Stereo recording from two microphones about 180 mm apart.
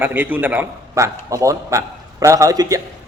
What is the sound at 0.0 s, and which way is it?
A man's voice, 10° right (ahead or behind).